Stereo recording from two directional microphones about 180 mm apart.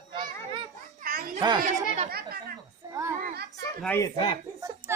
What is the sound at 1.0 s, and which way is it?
Children playing, 55° right (ahead or behind).